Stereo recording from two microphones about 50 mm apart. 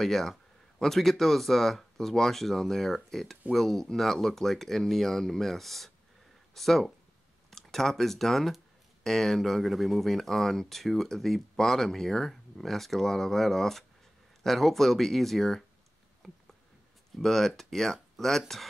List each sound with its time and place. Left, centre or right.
0.0 s speech: centre
16.2 s a sound: centre
17.2 s speech: centre